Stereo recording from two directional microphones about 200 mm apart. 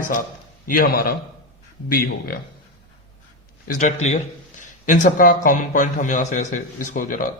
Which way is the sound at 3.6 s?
35° left (ahead or behind).